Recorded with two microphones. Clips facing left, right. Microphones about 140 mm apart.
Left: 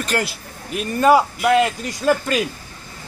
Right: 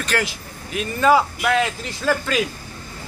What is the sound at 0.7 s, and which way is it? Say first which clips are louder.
Speech: left 2 dB; 5° left (ahead or behind).